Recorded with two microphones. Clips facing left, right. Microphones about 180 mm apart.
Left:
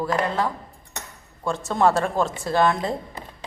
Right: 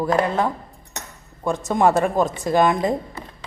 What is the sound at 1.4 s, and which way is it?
Speech, 20° right (ahead or behind).